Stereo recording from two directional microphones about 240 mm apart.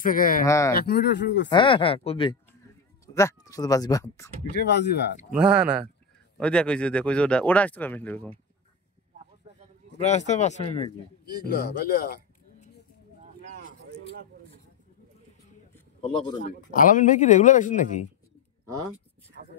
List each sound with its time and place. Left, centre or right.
0.0 s speech: left
0.5 s speech: centre
0.7 s speech: left
1.5 s speech: left
4.6 s speech: left
5.3 s speech: centre
10.0 s speech: left
11.3 s speech: left
16.4 s speech: left